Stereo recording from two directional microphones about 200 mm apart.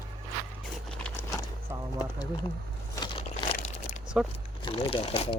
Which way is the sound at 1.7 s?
10° right (ahead or behind).